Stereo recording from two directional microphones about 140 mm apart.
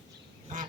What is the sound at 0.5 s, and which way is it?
Duck, 70° right (ahead or behind).